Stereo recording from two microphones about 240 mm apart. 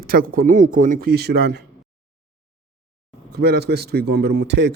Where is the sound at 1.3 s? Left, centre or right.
Right.